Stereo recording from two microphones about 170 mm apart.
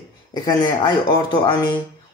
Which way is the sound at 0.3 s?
25° left (ahead or behind).